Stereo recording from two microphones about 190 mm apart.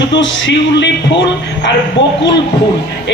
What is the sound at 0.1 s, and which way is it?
Speech, 75° left (ahead or behind).